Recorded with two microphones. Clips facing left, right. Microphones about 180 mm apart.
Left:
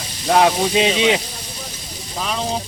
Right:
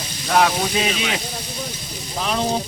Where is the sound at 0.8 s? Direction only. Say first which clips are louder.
Left 7 dB; 25° left (ahead or behind).